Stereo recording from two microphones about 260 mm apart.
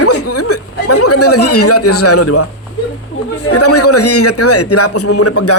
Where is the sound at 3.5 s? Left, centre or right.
Left.